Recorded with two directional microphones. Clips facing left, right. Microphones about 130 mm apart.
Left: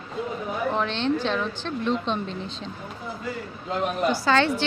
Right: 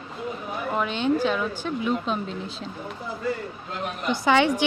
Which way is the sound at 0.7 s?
5° right (ahead or behind).